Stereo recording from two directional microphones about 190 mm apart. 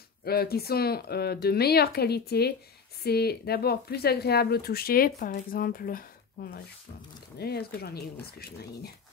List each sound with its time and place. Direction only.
0.2 s speech: 55° left (ahead or behind)